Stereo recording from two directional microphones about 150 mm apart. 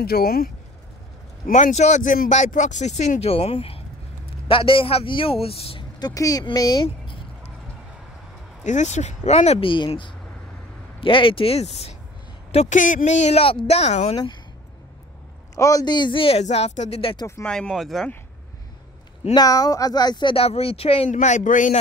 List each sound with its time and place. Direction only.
0.0 s speech: 90° left
1.5 s speech: 55° left (ahead or behind)
5.9 s speech: 25° left (ahead or behind)
8.6 s speech: 50° left (ahead or behind)
14.1 s speech: 30° left (ahead or behind)
15.5 s speech: 20° left (ahead or behind)
17.4 s speech: 5° left (ahead or behind)
19.3 s speech: 25° left (ahead or behind); by 21.1 s 40° left (ahead or behind)
21.1 s speech: 55° left (ahead or behind)